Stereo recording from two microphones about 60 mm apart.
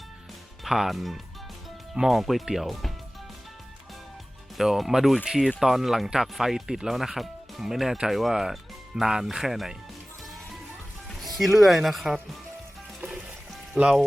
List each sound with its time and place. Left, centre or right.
0.6 s speech: centre
4.5 s speech: centre
11.1 s speech: centre
13.7 s speech: right